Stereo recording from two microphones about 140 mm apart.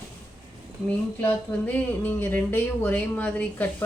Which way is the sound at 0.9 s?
10° left (ahead or behind).